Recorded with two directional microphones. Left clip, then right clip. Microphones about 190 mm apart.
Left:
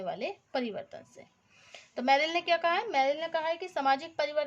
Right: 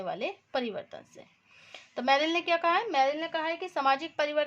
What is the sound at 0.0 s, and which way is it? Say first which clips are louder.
A woman's voice: right 1 dB; 20° right (ahead or behind).